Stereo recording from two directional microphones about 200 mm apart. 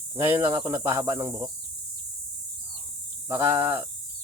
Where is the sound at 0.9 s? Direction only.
15° right (ahead or behind).